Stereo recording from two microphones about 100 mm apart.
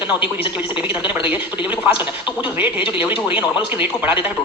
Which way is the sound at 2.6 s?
20° right (ahead or behind).